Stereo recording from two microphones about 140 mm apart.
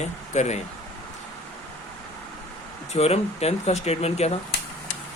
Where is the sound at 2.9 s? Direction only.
50° left (ahead or behind).